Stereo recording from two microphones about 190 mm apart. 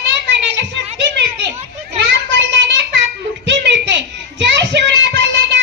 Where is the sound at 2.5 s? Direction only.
70° right (ahead or behind).